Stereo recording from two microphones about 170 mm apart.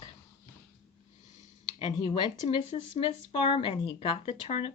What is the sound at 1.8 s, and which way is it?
Speech, 30° left (ahead or behind).